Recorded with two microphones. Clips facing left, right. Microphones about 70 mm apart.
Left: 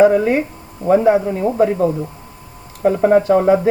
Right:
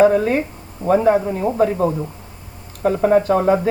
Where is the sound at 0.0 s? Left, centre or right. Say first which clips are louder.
Left 2 dB; centre.